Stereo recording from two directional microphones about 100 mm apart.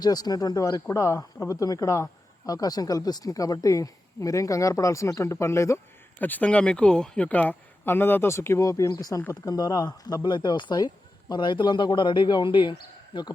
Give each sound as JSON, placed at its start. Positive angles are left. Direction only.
{"t": 0.0, "sound": "speech", "side_deg": 40}
{"t": 6.1, "sound": "speech", "side_deg": 20}
{"t": 10.2, "sound": "speech", "side_deg": 50}